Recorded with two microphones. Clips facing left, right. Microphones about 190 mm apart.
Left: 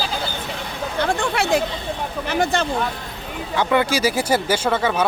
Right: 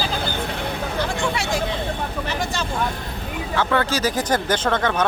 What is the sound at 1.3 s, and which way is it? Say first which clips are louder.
Hubbub: left 5 dB; 60° left (ahead or behind).